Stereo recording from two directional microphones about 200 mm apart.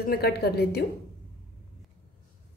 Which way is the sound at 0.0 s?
50° left (ahead or behind).